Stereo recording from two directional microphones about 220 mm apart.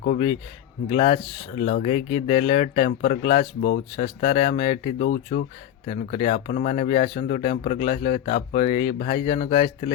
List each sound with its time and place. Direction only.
0.0 s speech: 35° left (ahead or behind)
3.6 s speech: 45° left (ahead or behind)
4.2 s speech: 30° left (ahead or behind)
5.0 s speech: 40° left (ahead or behind)